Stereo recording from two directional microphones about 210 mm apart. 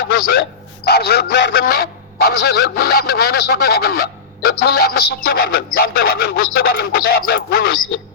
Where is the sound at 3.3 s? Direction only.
50° left (ahead or behind).